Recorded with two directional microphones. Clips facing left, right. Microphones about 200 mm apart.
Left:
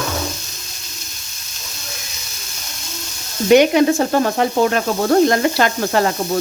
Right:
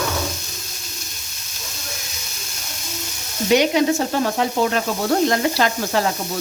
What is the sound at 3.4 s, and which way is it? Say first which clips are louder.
Sizzle: left 5 dB; 55° left (ahead or behind).